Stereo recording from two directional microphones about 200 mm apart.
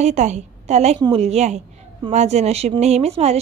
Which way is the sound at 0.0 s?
35° right (ahead or behind).